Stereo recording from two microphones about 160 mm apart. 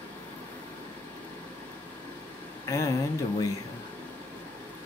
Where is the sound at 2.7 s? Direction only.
20° left (ahead or behind).